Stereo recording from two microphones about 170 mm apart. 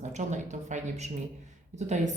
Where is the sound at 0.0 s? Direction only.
45° right (ahead or behind).